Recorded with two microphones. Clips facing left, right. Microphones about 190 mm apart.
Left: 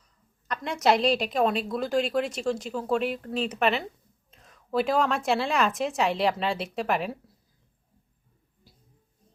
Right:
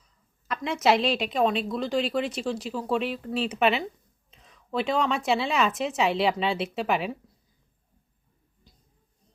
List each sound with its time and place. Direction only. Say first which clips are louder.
0.4 s a woman's voice: right 1 dB; centre (ahead or behind)